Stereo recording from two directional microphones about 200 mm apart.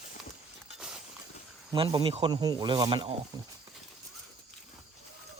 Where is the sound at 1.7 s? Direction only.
25° right (ahead or behind).